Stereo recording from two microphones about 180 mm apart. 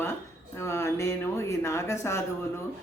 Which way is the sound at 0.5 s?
15° left (ahead or behind).